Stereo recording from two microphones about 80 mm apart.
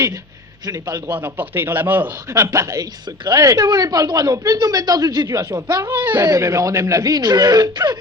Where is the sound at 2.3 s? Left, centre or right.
Right.